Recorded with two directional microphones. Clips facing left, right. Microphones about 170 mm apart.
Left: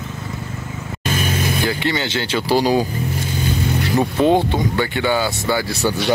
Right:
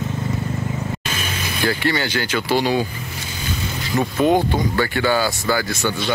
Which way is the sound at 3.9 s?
30° left (ahead or behind).